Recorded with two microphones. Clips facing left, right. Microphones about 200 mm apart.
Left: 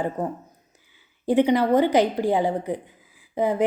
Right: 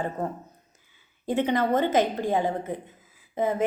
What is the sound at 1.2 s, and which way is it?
A woman's voice, 15° left (ahead or behind).